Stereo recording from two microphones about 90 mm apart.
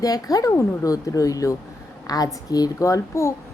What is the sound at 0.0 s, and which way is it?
A woman's voice, 45° left (ahead or behind).